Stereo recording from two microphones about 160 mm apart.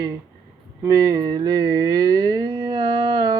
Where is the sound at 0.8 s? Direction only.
20° right (ahead or behind).